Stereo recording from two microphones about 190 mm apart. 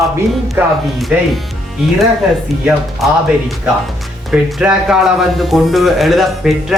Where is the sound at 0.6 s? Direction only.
10° right (ahead or behind).